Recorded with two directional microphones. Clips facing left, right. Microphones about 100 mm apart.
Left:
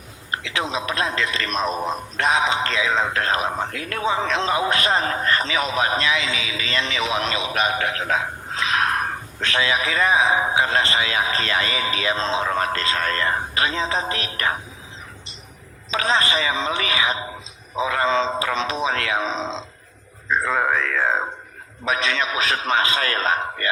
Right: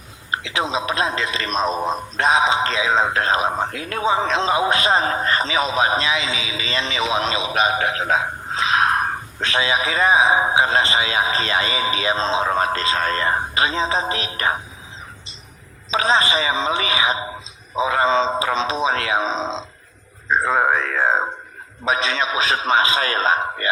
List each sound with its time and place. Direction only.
0.3 s a man's voice: 20° right (ahead or behind)
15.9 s a man's voice: 25° right (ahead or behind)